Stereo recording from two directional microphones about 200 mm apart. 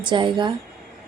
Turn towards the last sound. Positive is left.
turn(degrees=-25)  # may be behind; listen again after turning